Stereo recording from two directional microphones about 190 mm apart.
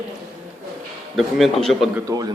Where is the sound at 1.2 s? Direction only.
Centre (ahead or behind).